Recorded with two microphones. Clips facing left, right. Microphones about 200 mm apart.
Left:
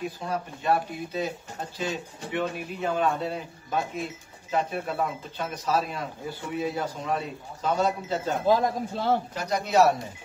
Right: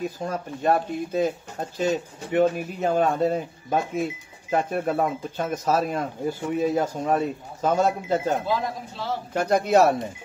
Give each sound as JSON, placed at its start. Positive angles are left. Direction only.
{"t": 0.2, "sound": "speech", "side_deg": -45}
{"t": 8.5, "sound": "speech", "side_deg": 50}
{"t": 9.3, "sound": "speech", "side_deg": -50}